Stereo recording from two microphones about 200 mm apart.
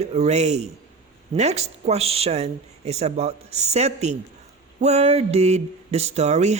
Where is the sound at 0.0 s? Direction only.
30° right (ahead or behind).